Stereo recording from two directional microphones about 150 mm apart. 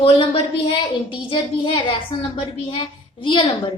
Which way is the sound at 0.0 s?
40° left (ahead or behind).